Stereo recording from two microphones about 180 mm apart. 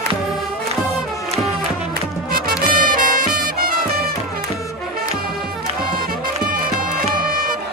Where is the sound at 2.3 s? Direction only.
55° right (ahead or behind).